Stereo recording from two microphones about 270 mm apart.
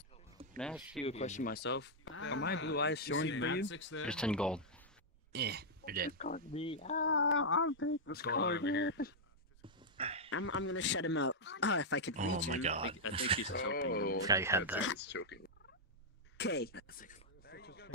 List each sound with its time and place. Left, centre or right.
0.6 s speech: centre
1.0 s speech: left
4.0 s speech: centre
5.3 s speech: right
6.1 s speech: left
7.1 s speech: left
9.9 s a sound: right
10.3 s speech: left
12.2 s speech: right
13.5 s speech: left
13.9 s speech: left
14.2 s speech: centre
14.8 s speech: left
16.3 s a sound: left